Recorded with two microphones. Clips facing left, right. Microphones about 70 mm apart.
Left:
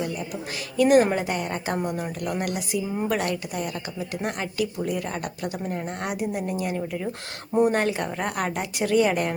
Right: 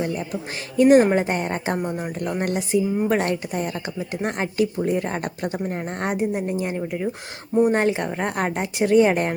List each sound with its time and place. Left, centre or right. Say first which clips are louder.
0.8 s a woman's voice: right 4 dB; right